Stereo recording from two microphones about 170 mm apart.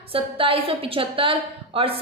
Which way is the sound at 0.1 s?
30° right (ahead or behind).